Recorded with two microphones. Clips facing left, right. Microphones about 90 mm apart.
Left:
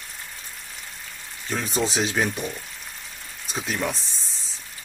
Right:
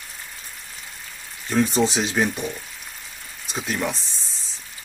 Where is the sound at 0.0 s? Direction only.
Centre (ahead or behind).